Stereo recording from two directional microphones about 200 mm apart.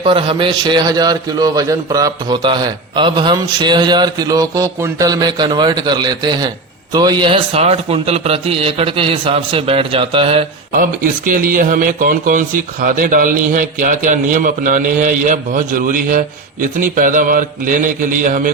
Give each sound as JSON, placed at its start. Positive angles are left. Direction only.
{"t": 0.0, "sound": "a man's voice", "side_deg": -25}
{"t": 10.7, "sound": "a man's voice", "side_deg": -45}